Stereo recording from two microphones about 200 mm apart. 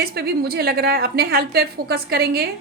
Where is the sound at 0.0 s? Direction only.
50° right (ahead or behind).